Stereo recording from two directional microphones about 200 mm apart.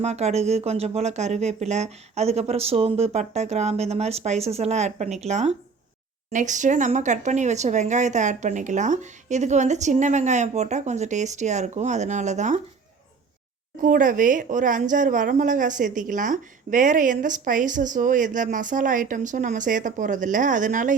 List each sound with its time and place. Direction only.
0.0 s a woman's voice: 35° right (ahead or behind)
13.8 s a woman's voice: 40° right (ahead or behind)